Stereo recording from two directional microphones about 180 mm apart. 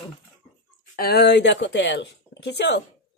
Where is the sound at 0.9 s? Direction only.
60° left (ahead or behind).